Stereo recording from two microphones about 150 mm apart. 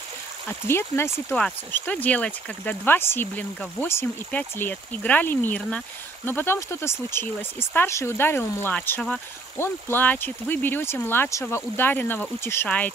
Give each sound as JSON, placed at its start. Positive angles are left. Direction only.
{"t": 0.5, "sound": "speech", "side_deg": 15}